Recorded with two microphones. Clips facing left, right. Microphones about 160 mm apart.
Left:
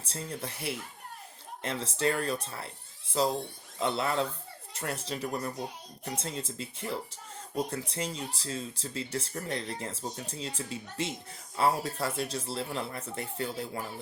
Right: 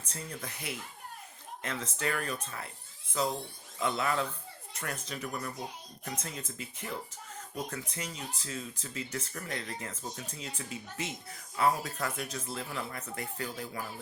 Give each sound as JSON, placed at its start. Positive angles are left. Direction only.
{"t": 0.0, "sound": "speech", "side_deg": 30}